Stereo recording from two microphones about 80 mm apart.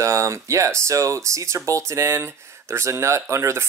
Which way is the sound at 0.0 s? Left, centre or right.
Right.